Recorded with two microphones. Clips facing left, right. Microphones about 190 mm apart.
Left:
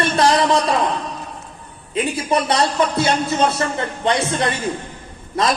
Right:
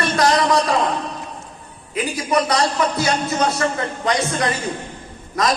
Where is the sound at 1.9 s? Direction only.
30° left (ahead or behind).